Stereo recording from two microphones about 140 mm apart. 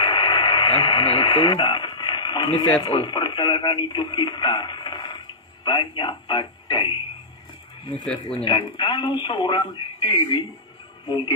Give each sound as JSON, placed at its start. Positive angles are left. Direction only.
{"t": 0.0, "sound": "radio", "side_deg": 35}
{"t": 1.3, "sound": "speech", "side_deg": 35}
{"t": 8.5, "sound": "speech", "side_deg": 30}